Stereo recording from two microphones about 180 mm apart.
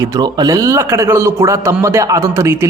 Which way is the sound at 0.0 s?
20° right (ahead or behind).